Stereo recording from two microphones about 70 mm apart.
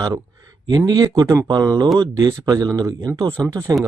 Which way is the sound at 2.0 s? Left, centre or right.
Right.